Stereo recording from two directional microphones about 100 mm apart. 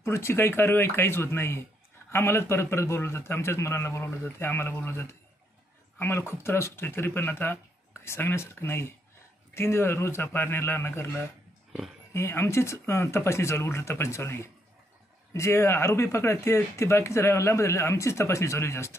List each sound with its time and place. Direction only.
0.0 s speech: 25° left (ahead or behind)